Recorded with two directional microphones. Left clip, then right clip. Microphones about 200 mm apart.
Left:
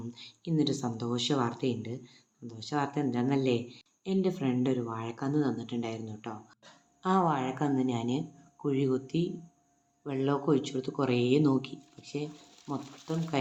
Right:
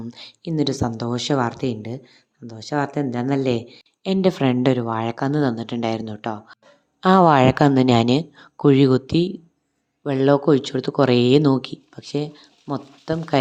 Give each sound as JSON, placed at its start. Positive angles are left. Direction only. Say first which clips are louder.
{"t": 0.1, "sound": "speech", "louder": "right 6 dB", "side_deg": -45}